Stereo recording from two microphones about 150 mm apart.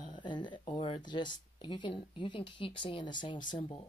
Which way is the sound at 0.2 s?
30° left (ahead or behind).